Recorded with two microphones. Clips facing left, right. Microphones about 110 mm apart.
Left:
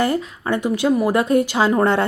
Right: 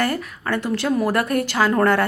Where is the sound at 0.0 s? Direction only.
20° left (ahead or behind).